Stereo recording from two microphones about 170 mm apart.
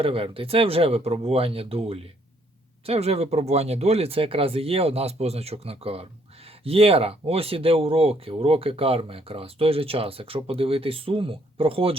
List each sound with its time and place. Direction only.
0.0 s speech: 30° right (ahead or behind)